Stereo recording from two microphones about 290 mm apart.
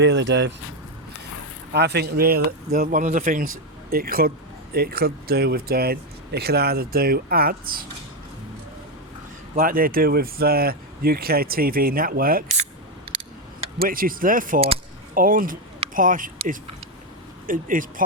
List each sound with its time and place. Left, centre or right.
0.0 s speech: right
1.7 s speech: right
9.6 s speech: right
13.7 s speech: right